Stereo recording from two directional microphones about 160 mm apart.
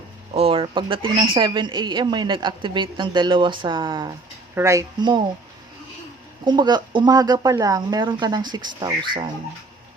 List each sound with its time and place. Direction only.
0.3 s speech: 35° right (ahead or behind)
6.4 s speech: 30° right (ahead or behind)